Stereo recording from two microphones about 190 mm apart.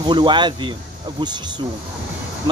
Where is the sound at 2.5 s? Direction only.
25° right (ahead or behind).